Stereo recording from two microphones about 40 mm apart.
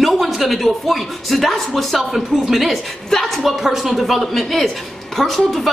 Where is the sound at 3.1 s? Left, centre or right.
Centre.